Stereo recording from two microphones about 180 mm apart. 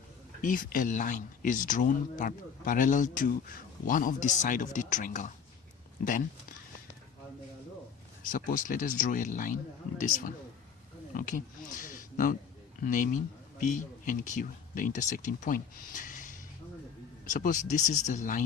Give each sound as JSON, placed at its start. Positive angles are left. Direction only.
{"t": 0.4, "sound": "speech", "side_deg": 50}
{"t": 8.3, "sound": "speech", "side_deg": 50}